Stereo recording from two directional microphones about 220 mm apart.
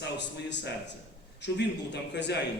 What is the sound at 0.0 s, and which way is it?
A man's voice, 50° left (ahead or behind).